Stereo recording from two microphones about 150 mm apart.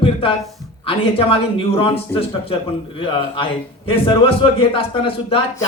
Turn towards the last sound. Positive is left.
turn(degrees=40)  # may be behind; listen again after turning